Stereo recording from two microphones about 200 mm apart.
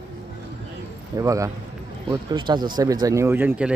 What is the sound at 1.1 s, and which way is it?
Speech, 15° right (ahead or behind).